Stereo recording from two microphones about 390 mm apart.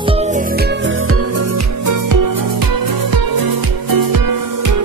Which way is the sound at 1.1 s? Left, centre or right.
Right.